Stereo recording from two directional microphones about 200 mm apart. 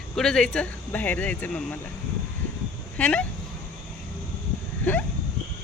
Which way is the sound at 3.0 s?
5° left (ahead or behind).